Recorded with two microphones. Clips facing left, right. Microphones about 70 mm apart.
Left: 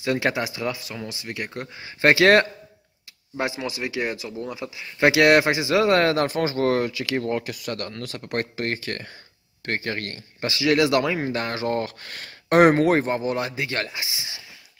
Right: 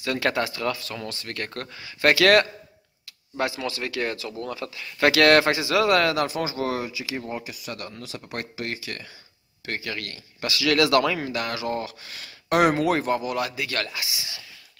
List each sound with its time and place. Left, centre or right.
0.0 s speech: left
1.8 s speech: left